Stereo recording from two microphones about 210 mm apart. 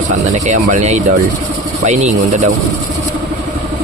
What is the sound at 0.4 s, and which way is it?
Speech, 35° right (ahead or behind).